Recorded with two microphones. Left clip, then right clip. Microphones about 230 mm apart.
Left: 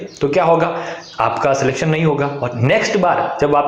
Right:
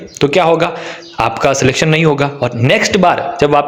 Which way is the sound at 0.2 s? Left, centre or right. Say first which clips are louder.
Right 3 dB; right.